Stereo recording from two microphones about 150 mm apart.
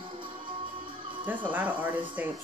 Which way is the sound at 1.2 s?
10° right (ahead or behind).